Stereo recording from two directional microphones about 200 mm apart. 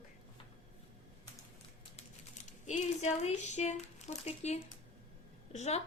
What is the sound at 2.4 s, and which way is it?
A woman's voice, 35° left (ahead or behind).